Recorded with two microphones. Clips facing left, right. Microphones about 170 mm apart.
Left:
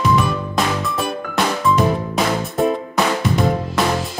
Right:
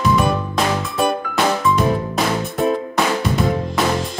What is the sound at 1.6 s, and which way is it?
Music, centre (ahead or behind).